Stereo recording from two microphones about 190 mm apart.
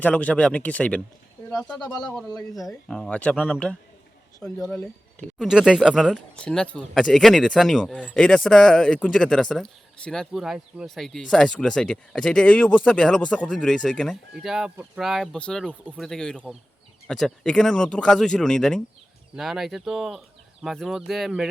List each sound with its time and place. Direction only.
0.0 s speech: 5° left (ahead or behind)
2.6 s speech: 5° left (ahead or behind)
5.4 s speech: 5° right (ahead or behind)